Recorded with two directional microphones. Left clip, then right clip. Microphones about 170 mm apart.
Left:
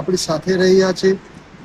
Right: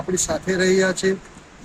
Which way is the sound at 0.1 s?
35° right (ahead or behind).